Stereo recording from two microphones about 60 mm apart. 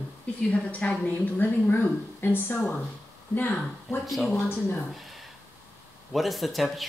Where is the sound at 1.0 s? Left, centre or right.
Left.